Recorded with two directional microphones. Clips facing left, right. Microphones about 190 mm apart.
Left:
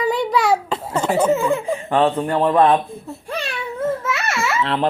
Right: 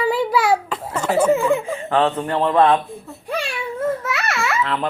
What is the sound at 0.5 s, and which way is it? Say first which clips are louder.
Babbling: left 1 dB; 25° left (ahead or behind).